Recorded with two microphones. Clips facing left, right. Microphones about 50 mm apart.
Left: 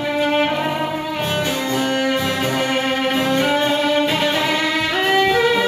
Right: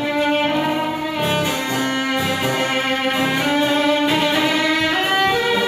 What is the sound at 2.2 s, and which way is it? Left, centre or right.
Music, centre.